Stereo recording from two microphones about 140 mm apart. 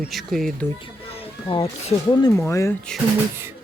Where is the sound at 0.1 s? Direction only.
Centre (ahead or behind).